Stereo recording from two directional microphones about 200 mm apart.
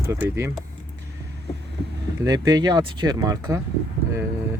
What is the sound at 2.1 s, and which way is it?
Speech, 20° right (ahead or behind).